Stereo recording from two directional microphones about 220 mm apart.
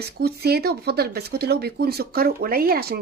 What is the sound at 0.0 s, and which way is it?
Speech, 45° right (ahead or behind).